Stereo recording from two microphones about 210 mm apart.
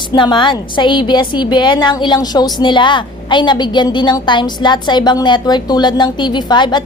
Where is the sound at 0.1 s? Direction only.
20° left (ahead or behind).